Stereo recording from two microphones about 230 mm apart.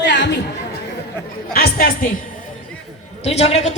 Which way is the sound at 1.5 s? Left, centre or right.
Left.